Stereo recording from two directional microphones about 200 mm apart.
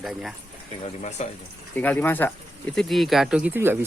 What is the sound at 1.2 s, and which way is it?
Speech, 35° left (ahead or behind).